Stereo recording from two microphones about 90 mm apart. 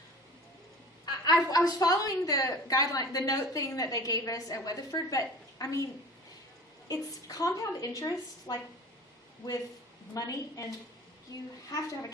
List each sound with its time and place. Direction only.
1.0 s a woman's voice: 45° left (ahead or behind)
6.8 s a woman's voice: 45° left (ahead or behind)
10.2 s a woman's voice: 40° left (ahead or behind)